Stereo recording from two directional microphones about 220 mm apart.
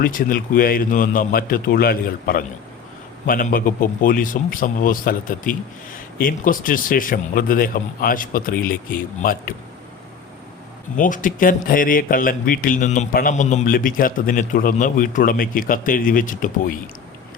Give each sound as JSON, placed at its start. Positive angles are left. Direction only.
{"t": 0.0, "sound": "speech", "side_deg": 40}
{"t": 10.9, "sound": "speech", "side_deg": 35}